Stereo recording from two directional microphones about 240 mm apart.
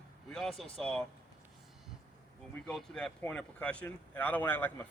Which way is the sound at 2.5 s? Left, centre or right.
Centre.